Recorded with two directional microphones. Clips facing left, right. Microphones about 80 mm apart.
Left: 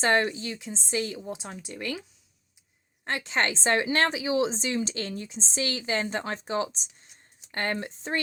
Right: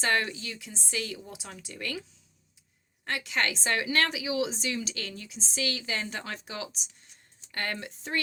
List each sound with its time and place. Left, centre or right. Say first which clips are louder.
0.0 s a woman's voice: left 4 dB; left